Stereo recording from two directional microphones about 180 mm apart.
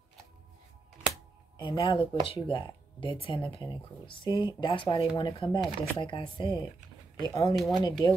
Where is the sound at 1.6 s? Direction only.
25° left (ahead or behind).